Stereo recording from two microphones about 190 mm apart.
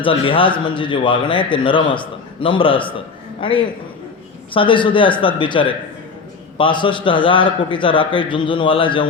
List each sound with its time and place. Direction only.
0.0 s a man's voice: 25° left (ahead or behind)